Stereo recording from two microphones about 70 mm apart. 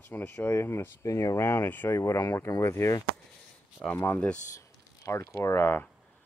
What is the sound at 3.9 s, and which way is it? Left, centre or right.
Speech, left.